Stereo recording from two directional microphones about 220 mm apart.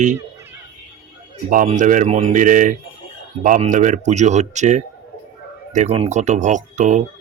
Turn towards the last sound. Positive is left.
turn(degrees=-35)  # may be behind; listen again after turning